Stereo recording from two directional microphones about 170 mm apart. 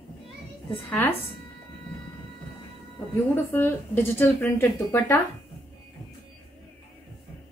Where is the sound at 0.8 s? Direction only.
10° left (ahead or behind).